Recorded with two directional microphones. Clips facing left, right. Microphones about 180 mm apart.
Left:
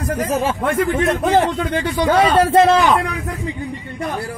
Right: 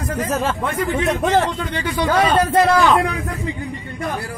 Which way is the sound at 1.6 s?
50° left (ahead or behind).